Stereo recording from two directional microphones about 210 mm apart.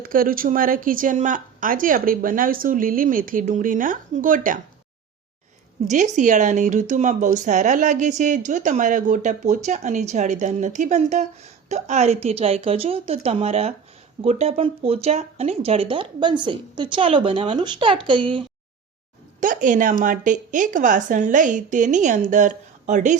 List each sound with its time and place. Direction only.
0.0 s speech: 40° right (ahead or behind)
5.9 s speech: 35° right (ahead or behind)
19.4 s speech: 40° right (ahead or behind)